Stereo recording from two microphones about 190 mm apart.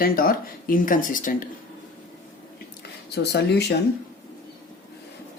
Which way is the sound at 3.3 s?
60° left (ahead or behind).